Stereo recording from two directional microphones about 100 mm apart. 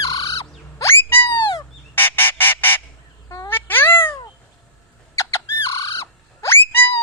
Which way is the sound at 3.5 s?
20° left (ahead or behind).